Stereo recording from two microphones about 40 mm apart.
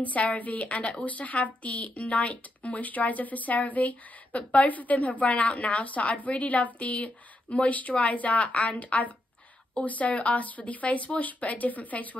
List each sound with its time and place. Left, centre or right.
0.0 s speech: left